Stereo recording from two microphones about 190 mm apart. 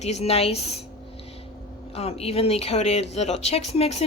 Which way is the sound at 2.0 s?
30° left (ahead or behind).